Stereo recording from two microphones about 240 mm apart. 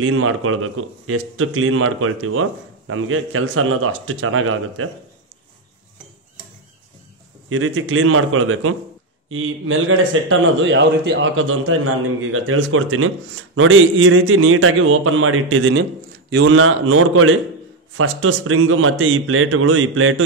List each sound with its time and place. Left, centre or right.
0.0 s a man's voice: right
7.4 s a man's voice: right